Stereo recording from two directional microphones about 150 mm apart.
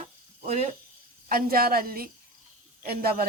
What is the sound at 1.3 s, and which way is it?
Speech, 80° right.